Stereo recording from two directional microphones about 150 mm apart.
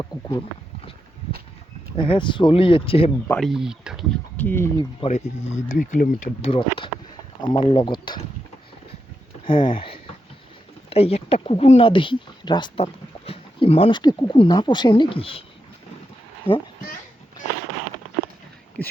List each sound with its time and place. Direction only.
0.0 s speech: 30° left (ahead or behind)
2.0 s speech: 30° left (ahead or behind)
3.2 s speech: 5° left (ahead or behind)
3.5 s speech: 5° right (ahead or behind)
4.1 s speech: 10° left (ahead or behind)
4.9 s speech: 50° left (ahead or behind)
6.4 s speech: 35° left (ahead or behind)
9.5 s speech: 35° left (ahead or behind)
16.5 s speech: 10° left (ahead or behind)